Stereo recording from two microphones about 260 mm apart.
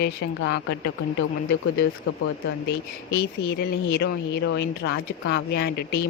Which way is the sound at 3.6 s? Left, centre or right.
Left.